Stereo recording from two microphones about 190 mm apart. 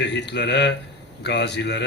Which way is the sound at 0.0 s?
65° left (ahead or behind).